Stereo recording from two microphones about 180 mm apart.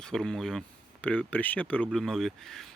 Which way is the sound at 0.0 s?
5° left (ahead or behind).